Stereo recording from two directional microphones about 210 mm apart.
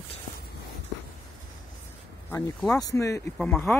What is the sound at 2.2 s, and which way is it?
Speech, 15° left (ahead or behind).